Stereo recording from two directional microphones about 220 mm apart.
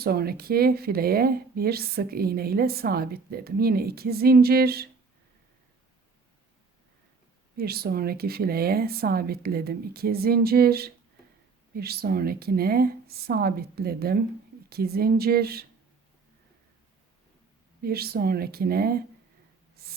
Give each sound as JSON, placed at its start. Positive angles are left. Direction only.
{"t": 0.0, "sound": "speech", "side_deg": -45}
{"t": 7.5, "sound": "speech", "side_deg": -45}
{"t": 17.8, "sound": "speech", "side_deg": -45}
{"t": 19.8, "sound": "spray", "side_deg": -45}